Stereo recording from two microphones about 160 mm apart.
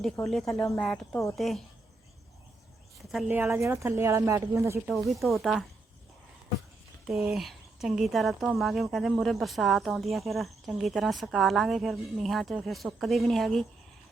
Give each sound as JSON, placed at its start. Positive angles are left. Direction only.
{"t": 0.3, "sound": "speech", "side_deg": 0}
{"t": 3.2, "sound": "speech", "side_deg": -15}
{"t": 4.9, "sound": "speech", "side_deg": 0}
{"t": 7.1, "sound": "speech", "side_deg": 0}